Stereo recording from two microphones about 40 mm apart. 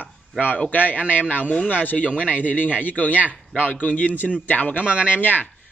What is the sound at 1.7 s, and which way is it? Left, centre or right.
Speech, left.